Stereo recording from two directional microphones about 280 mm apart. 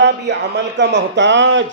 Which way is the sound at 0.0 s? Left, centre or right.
Right.